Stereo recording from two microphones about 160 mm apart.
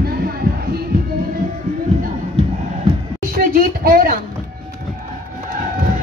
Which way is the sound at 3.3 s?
65° right (ahead or behind).